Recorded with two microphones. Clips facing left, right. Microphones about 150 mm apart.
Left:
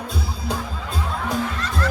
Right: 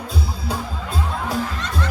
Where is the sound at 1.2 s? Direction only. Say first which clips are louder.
Even; centre (ahead or behind).